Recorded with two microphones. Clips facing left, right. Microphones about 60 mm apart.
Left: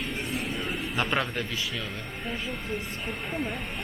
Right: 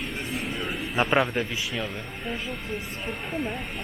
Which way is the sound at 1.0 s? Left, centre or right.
Centre.